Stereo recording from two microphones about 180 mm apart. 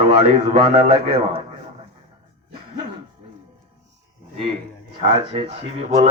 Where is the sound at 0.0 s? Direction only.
35° right (ahead or behind).